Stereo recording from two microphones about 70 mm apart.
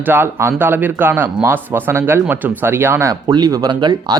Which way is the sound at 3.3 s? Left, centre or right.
Right.